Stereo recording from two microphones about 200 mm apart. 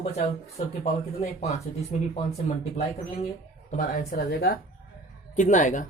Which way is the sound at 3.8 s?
50° left (ahead or behind).